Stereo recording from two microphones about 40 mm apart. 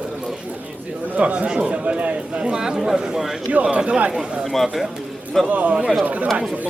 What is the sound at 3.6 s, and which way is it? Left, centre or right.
Speech, right.